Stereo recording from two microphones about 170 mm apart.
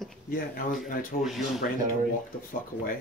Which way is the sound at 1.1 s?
55° left (ahead or behind).